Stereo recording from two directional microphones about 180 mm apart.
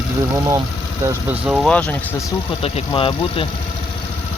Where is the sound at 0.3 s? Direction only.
20° right (ahead or behind).